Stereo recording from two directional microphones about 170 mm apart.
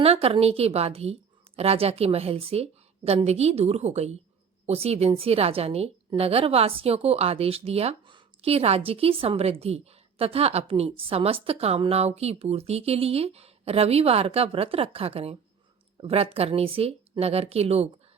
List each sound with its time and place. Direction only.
0.0 s speech: 35° right (ahead or behind)